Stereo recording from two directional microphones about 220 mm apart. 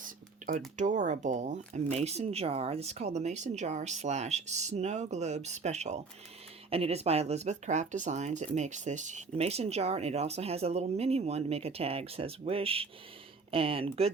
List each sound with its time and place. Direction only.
0.8 s speech: 35° right (ahead or behind)